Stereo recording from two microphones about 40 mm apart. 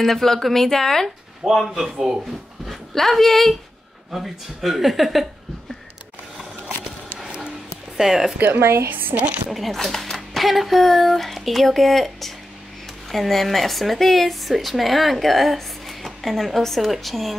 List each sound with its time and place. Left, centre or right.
0.0 s speech: centre
1.4 s speech: centre
2.9 s speech: centre
4.1 s speech: centre
8.0 s speech: centre
8.4 s a woman's voice: right
9.1 s a woman's voice: right
9.5 s speech: centre